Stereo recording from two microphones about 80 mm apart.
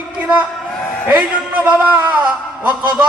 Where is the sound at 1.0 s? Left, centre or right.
Centre.